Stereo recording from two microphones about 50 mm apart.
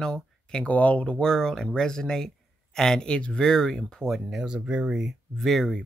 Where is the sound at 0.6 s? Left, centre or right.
Left.